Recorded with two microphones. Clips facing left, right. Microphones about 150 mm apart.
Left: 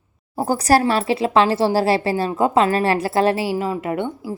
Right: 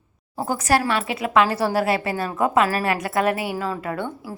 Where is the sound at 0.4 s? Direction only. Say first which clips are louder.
Left 4 dB; 35° left (ahead or behind).